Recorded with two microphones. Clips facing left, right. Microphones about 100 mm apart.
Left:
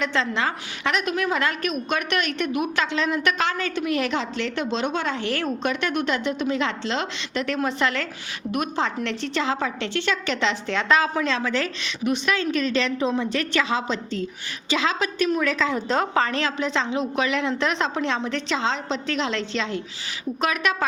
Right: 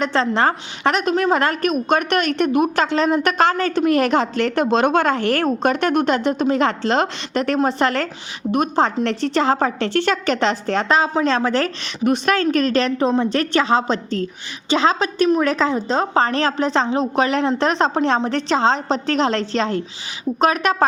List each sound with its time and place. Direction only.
0.0 s a woman's voice: 35° right (ahead or behind)
11.3 s a woman's voice: 40° right (ahead or behind)
15.7 s a woman's voice: 25° right (ahead or behind)